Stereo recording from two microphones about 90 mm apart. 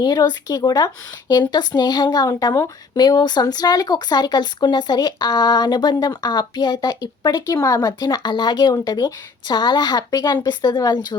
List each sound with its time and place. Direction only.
0.0 s speech: 55° left (ahead or behind)